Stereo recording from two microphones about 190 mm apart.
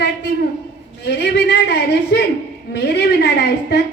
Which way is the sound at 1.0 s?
60° left (ahead or behind).